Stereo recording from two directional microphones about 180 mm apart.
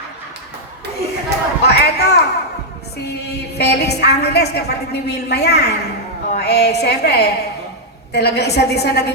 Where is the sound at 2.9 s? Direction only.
65° left (ahead or behind).